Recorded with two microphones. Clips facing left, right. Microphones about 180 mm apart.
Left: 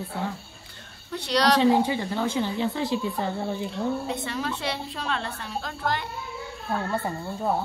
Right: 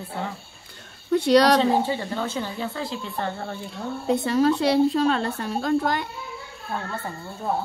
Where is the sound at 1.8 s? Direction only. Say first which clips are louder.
Left 1 dB; 15° left (ahead or behind).